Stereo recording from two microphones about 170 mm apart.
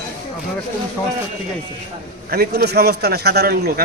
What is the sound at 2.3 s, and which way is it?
A man's voice, 70° right (ahead or behind).